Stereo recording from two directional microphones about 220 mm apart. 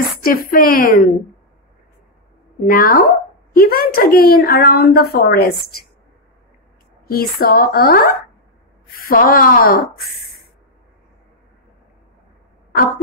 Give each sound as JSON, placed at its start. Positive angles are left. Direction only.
{"t": 0.2, "sound": "speech", "side_deg": 40}
{"t": 2.6, "sound": "speech", "side_deg": 40}
{"t": 7.1, "sound": "speech", "side_deg": 45}